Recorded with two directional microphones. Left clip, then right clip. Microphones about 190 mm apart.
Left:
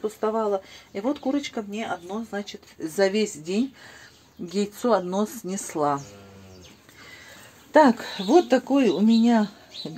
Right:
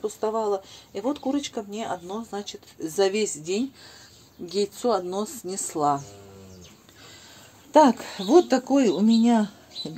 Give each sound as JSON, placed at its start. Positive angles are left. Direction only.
{"t": 0.0, "sound": "speech", "side_deg": 10}
{"t": 7.7, "sound": "speech", "side_deg": 5}